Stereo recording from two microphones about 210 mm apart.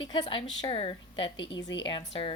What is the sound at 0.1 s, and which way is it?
A woman's voice, 25° left (ahead or behind).